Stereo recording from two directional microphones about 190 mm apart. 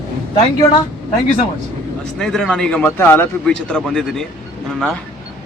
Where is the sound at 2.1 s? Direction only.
5° left (ahead or behind).